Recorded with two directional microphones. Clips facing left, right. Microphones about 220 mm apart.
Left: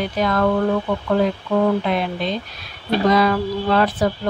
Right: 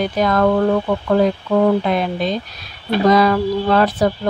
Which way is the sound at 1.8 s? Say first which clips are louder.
Right 3 dB; 40° right (ahead or behind).